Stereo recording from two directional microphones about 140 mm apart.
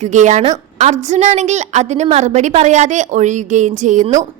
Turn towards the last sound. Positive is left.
turn(degrees=-60)  # may be behind; listen again after turning